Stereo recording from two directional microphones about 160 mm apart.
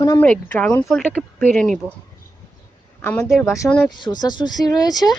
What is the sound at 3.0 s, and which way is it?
Speech, 15° left (ahead or behind).